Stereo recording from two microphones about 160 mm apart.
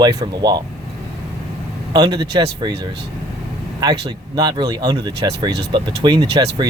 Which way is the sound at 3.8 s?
25° right (ahead or behind).